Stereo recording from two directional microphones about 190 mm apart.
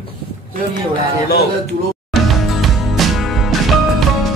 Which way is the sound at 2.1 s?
Centre (ahead or behind).